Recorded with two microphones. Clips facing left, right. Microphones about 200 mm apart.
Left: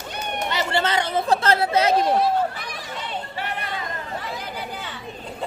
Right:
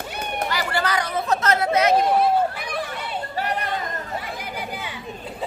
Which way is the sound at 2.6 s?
55° right (ahead or behind).